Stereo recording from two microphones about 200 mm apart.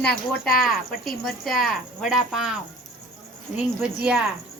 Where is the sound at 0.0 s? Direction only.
50° left (ahead or behind).